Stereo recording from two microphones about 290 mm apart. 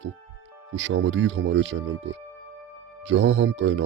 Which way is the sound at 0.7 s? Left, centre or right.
Right.